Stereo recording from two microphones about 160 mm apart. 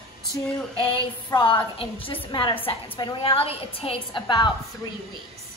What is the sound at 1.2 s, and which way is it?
A woman's voice, 30° left (ahead or behind).